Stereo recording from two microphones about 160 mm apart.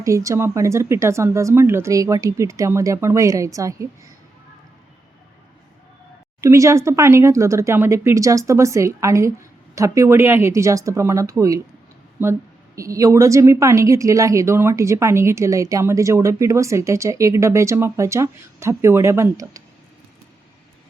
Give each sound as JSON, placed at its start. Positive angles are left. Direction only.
{"t": 0.0, "sound": "a woman's voice", "side_deg": -20}
{"t": 6.4, "sound": "a woman's voice", "side_deg": -20}